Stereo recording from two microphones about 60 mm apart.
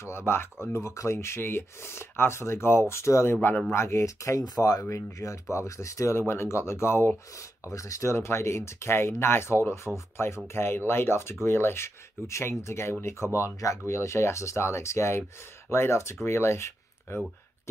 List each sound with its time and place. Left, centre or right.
0.0 s speech: left
0.8 s speech: left
3.3 s speech: left
3.7 s speech: left
4.8 s speech: left